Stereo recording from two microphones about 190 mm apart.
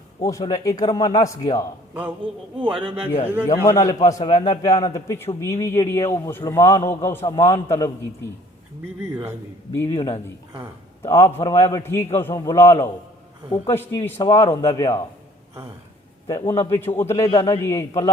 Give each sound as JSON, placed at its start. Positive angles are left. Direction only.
{"t": 0.2, "sound": "speech", "side_deg": 20}
{"t": 1.9, "sound": "a man's voice", "side_deg": -10}
{"t": 2.7, "sound": "a man's voice", "side_deg": -30}
{"t": 3.4, "sound": "a man's voice", "side_deg": 15}
{"t": 9.7, "sound": "a man's voice", "side_deg": 15}
{"t": 16.2, "sound": "a man's voice", "side_deg": 20}